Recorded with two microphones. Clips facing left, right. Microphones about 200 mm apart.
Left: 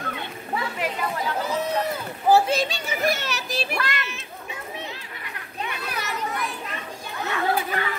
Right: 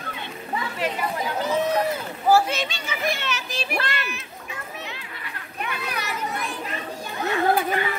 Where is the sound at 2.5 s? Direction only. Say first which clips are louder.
Left 4 dB; 40° left (ahead or behind).